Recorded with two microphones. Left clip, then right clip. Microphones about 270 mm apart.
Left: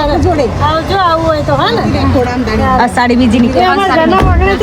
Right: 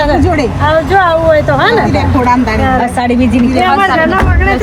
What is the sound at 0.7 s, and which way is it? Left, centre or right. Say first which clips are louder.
Speech: right 4 dB; centre.